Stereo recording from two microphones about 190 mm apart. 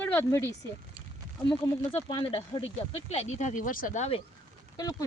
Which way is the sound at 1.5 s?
25° left (ahead or behind).